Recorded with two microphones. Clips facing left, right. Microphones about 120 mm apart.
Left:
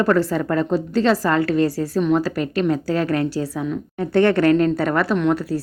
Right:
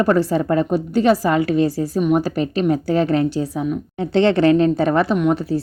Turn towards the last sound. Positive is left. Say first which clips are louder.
# right 1 dB
turn(degrees=-20)  # may be behind; listen again after turning